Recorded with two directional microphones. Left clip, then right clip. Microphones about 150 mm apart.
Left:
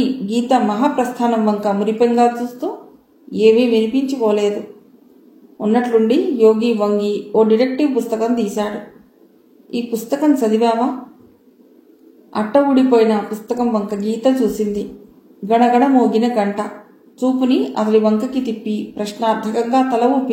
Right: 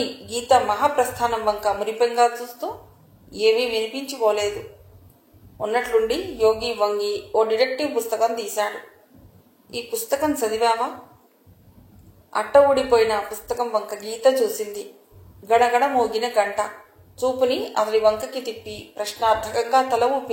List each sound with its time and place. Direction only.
0.3 s speech: 45° right (ahead or behind)
5.6 s speech: 45° right (ahead or behind)
12.4 s speech: 45° right (ahead or behind)